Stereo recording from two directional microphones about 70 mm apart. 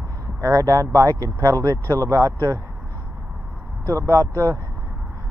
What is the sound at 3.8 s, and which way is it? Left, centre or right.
Speech, right.